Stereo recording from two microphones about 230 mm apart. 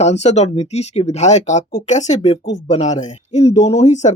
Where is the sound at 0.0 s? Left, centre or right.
Left.